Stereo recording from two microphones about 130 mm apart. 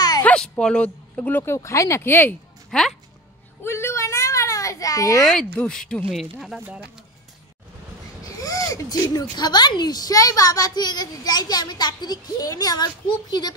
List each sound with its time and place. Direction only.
0.2 s speech: 10° left (ahead or behind)
3.6 s a sound: 20° left (ahead or behind)
5.3 s speech: 5° left (ahead or behind)
8.2 s speech: 25° left (ahead or behind)